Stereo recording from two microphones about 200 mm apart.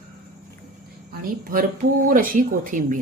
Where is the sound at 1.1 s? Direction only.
45° right (ahead or behind).